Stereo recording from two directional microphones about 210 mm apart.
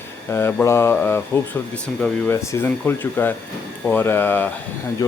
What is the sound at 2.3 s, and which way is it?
Speech, 10° left (ahead or behind).